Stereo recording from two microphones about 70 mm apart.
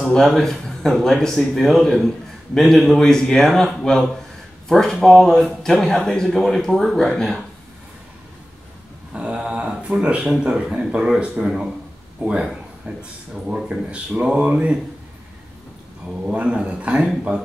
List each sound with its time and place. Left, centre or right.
0.0 s speech: centre
9.1 s a man's voice: centre
16.1 s speech: centre